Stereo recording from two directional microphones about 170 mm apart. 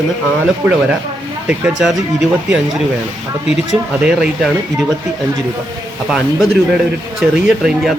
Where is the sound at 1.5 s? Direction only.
5° right (ahead or behind).